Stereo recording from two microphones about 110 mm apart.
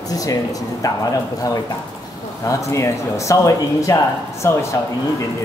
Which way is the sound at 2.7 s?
30° left (ahead or behind).